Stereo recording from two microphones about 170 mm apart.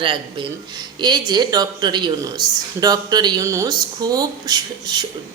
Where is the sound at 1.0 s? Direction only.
25° right (ahead or behind).